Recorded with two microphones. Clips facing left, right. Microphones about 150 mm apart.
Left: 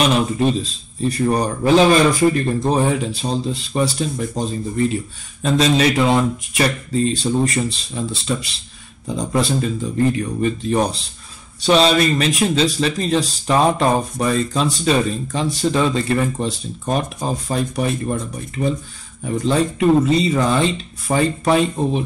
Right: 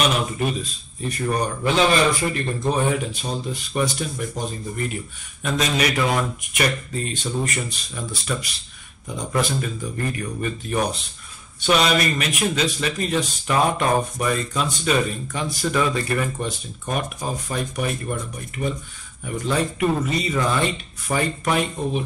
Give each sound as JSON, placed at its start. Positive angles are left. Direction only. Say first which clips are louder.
{"t": 0.0, "sound": "speech", "louder": "left 5 dB", "side_deg": 30}
{"t": 19.2, "sound": "speech", "louder": "left 5 dB", "side_deg": 30}